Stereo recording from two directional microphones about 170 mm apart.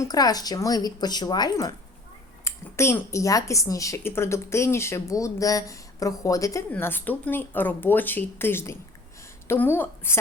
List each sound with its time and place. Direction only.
0.0 s speech: 20° left (ahead or behind)